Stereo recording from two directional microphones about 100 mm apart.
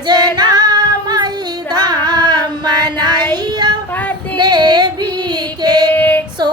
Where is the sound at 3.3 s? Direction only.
45° right (ahead or behind).